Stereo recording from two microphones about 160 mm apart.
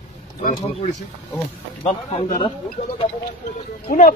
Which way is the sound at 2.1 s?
35° left (ahead or behind).